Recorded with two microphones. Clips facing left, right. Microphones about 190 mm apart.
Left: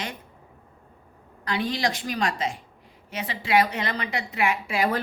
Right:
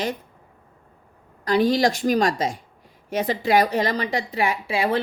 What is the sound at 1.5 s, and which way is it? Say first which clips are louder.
A woman's voice: right 8 dB; 40° right (ahead or behind).